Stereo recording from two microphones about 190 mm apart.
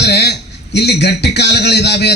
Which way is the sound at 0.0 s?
60° left (ahead or behind).